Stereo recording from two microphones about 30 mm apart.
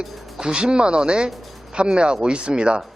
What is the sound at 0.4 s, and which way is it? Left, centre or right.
A man's voice, right.